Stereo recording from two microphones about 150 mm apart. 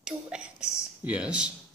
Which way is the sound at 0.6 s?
50° left (ahead or behind).